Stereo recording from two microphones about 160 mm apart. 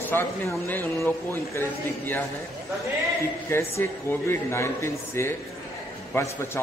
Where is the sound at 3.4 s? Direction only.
15° left (ahead or behind).